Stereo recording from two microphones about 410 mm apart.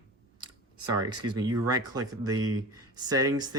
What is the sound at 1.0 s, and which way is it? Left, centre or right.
Speech, centre.